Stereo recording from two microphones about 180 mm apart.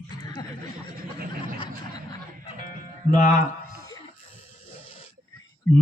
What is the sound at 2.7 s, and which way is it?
Music, 50° left (ahead or behind).